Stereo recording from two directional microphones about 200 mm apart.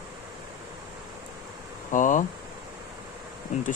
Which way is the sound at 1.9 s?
40° left (ahead or behind).